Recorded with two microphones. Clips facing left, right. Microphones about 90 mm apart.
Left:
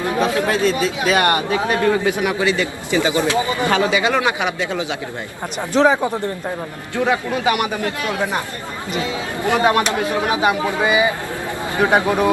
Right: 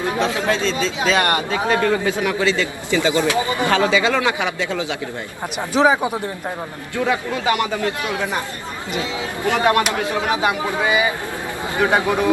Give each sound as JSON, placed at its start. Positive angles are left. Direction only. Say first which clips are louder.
{"t": 0.0, "sound": "speech", "louder": "left 2 dB", "side_deg": -20}
{"t": 0.4, "sound": "a man's voice", "louder": "left 2 dB", "side_deg": 15}
{"t": 5.5, "sound": "speech", "louder": "left 1 dB", "side_deg": -5}
{"t": 7.9, "sound": "speech", "louder": "even", "side_deg": -20}
{"t": 9.4, "sound": "a man's voice", "louder": "left 1 dB", "side_deg": 20}